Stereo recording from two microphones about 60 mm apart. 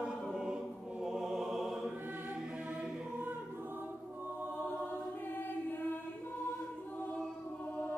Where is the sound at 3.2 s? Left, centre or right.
Right.